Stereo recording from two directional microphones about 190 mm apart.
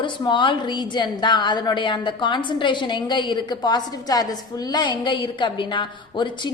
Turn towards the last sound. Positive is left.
turn(degrees=25)  # may be behind; listen again after turning